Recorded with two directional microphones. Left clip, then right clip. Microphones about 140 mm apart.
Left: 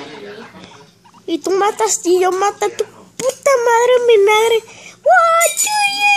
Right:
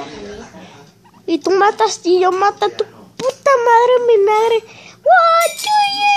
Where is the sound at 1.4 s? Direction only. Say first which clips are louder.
Right 2 dB; 10° left (ahead or behind).